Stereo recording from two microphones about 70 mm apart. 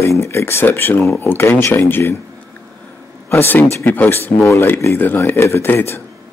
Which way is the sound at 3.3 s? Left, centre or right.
Left.